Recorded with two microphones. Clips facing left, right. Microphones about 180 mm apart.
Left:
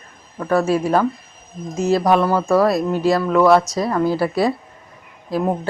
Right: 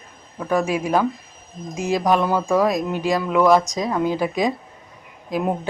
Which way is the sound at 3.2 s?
Centre (ahead or behind).